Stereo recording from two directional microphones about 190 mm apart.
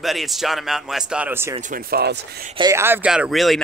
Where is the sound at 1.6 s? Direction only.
45° right (ahead or behind).